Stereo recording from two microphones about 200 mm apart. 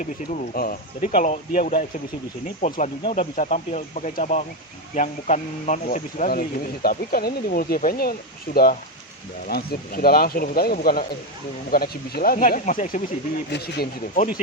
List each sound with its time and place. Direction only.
0.5 s speech: 45° left (ahead or behind)
13.5 s speech: 50° left (ahead or behind)